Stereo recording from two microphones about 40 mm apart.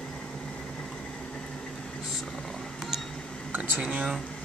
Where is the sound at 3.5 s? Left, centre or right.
Right.